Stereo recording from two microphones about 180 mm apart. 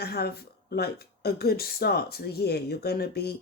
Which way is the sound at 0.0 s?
60° left (ahead or behind).